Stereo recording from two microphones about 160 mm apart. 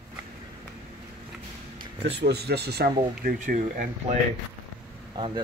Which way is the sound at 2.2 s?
90° right.